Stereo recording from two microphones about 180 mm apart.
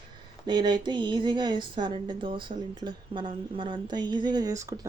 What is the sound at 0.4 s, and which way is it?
A woman's voice, 25° right (ahead or behind).